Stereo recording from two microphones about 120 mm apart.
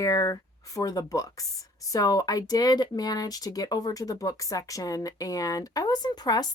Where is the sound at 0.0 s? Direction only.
30° left (ahead or behind).